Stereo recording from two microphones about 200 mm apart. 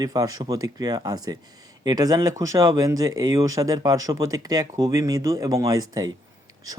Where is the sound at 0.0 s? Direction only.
20° right (ahead or behind).